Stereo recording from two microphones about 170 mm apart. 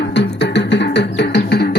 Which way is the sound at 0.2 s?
90° left.